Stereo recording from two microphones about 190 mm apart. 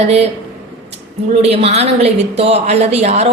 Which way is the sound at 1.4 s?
35° right (ahead or behind).